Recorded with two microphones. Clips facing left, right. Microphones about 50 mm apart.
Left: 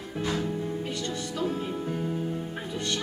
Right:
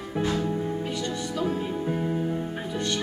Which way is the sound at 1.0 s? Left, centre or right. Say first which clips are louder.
Right 2 dB; centre.